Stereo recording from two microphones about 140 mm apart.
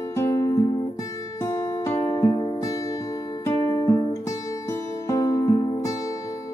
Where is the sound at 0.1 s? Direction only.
20° left (ahead or behind).